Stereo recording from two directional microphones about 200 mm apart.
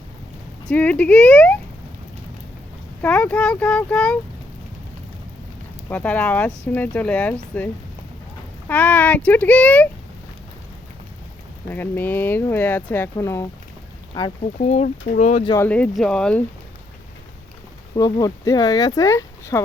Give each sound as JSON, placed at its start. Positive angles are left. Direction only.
{"t": 0.7, "sound": "speech", "side_deg": 5}
{"t": 3.0, "sound": "speech", "side_deg": 5}
{"t": 5.9, "sound": "speech", "side_deg": 10}
{"t": 8.6, "sound": "speech", "side_deg": 10}
{"t": 11.7, "sound": "speech", "side_deg": 10}
{"t": 14.6, "sound": "speech", "side_deg": 35}
{"t": 15.4, "sound": "speech", "side_deg": 10}
{"t": 17.9, "sound": "speech", "side_deg": 20}